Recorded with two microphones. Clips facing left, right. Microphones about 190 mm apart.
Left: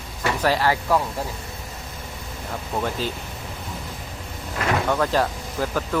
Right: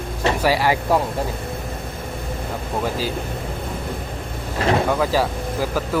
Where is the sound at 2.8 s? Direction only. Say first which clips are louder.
Right 2 dB; 5° right (ahead or behind).